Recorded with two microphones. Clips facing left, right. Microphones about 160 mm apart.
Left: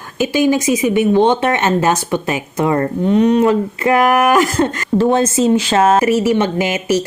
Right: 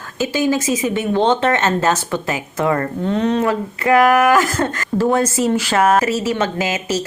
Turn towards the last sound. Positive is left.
turn(degrees=20)  # may be behind; listen again after turning